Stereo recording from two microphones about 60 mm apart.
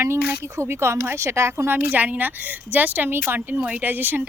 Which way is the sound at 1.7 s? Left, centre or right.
Right.